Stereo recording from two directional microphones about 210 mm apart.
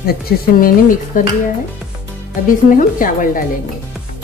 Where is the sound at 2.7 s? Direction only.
40° left (ahead or behind).